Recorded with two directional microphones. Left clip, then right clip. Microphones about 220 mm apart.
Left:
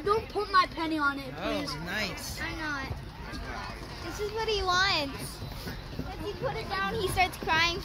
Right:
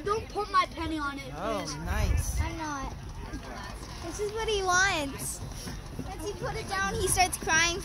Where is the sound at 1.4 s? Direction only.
30° right (ahead or behind).